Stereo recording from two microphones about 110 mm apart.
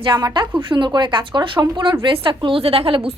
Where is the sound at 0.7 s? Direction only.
45° right (ahead or behind).